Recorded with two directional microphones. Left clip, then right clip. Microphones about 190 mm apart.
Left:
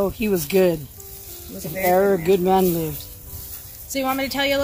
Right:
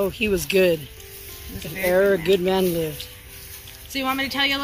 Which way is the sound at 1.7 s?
55° left (ahead or behind).